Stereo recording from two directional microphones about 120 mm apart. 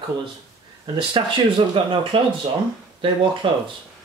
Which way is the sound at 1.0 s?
45° right (ahead or behind).